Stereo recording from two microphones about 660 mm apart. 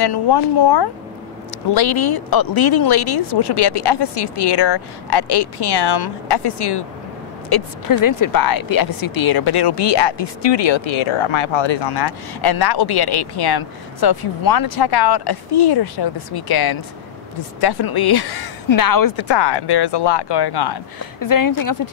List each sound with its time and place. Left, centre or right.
0.0 s speech: left